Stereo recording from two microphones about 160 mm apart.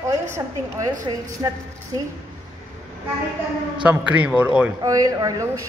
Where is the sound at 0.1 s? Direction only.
20° right (ahead or behind).